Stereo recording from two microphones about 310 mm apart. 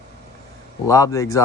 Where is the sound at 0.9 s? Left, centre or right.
Centre.